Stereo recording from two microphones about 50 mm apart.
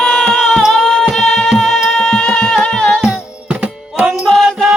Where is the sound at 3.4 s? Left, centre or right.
Right.